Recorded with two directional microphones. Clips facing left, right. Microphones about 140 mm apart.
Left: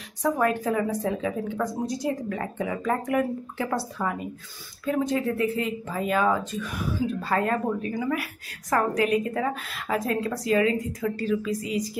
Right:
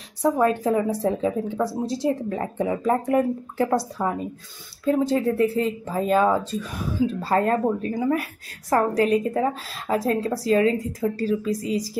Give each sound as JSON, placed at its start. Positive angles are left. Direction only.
{"t": 0.2, "sound": "speech", "side_deg": -30}